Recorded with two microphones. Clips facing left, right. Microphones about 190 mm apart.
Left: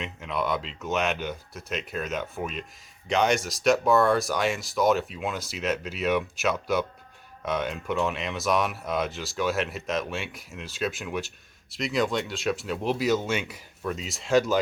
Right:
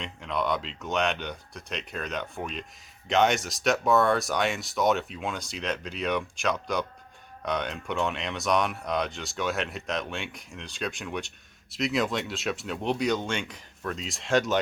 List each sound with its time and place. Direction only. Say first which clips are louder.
0.0 s speech: even; 5° left (ahead or behind)